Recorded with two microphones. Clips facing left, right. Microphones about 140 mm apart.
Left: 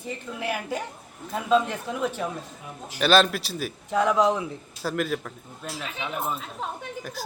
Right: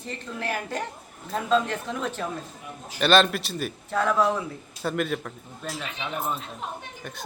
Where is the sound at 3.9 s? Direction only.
15° left (ahead or behind).